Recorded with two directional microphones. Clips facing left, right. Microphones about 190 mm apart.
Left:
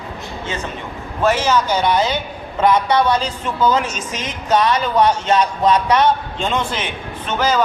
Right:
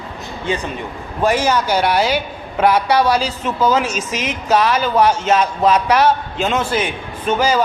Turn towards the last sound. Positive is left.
turn(degrees=-10)  # may be behind; listen again after turning